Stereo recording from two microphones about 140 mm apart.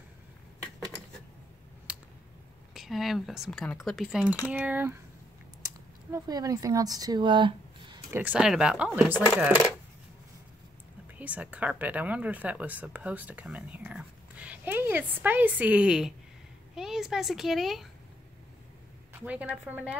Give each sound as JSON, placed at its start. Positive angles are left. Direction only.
{"t": 1.9, "sound": "a sound", "side_deg": -10}
{"t": 2.7, "sound": "speech", "side_deg": 0}
{"t": 6.1, "sound": "speech", "side_deg": -25}
{"t": 8.1, "sound": "speech", "side_deg": -10}
{"t": 11.1, "sound": "speech", "side_deg": -10}
{"t": 19.1, "sound": "speech", "side_deg": -10}